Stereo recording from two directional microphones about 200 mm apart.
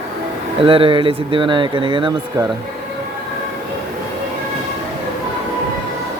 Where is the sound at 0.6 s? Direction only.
25° right (ahead or behind).